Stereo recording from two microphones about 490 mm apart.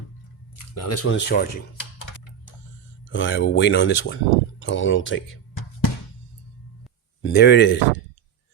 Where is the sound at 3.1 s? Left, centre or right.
Left.